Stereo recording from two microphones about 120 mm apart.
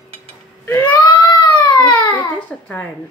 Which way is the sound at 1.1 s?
45° left (ahead or behind).